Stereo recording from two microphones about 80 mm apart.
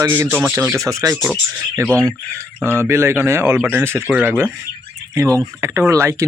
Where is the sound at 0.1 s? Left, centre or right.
Right.